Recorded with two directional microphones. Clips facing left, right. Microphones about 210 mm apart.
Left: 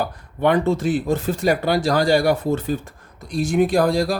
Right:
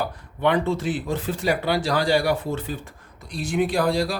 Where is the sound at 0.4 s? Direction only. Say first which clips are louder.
Left 4 dB; 45° left (ahead or behind).